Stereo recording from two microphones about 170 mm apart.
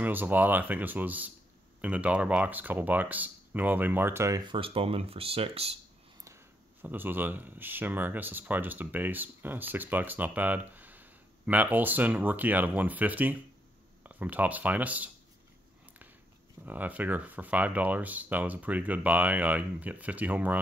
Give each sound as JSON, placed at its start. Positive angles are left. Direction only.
{"t": 0.0, "sound": "speech", "side_deg": -10}
{"t": 4.5, "sound": "speech", "side_deg": -30}
{"t": 6.2, "sound": "speech", "side_deg": -15}
{"t": 16.6, "sound": "speech", "side_deg": -10}